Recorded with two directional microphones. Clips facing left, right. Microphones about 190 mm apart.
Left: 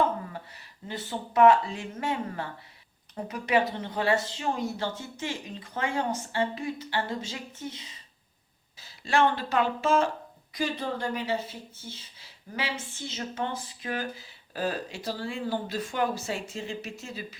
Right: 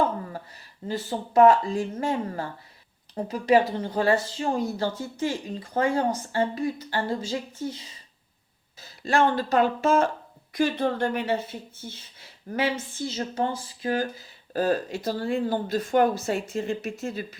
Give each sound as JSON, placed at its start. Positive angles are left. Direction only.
{"t": 0.9, "sound": "speech", "side_deg": -40}
{"t": 8.8, "sound": "speech", "side_deg": -45}
{"t": 10.5, "sound": "speech", "side_deg": -60}
{"t": 12.5, "sound": "speech", "side_deg": -50}
{"t": 13.1, "sound": "speech", "side_deg": -35}
{"t": 14.5, "sound": "speech", "side_deg": -45}